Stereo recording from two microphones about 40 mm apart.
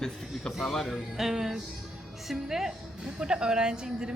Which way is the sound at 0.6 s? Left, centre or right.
Centre.